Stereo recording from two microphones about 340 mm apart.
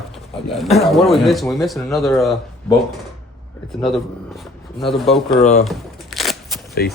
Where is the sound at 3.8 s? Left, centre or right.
Centre.